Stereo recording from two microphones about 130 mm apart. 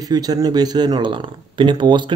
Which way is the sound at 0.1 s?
30° right (ahead or behind).